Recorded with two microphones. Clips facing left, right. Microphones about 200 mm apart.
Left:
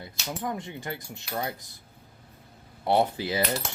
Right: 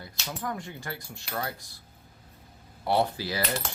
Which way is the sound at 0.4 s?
20° left (ahead or behind).